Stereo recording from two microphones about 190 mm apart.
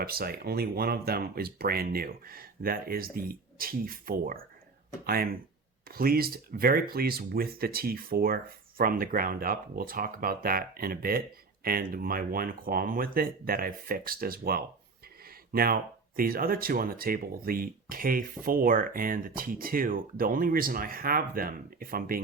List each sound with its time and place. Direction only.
0.0 s speech: 55° right (ahead or behind)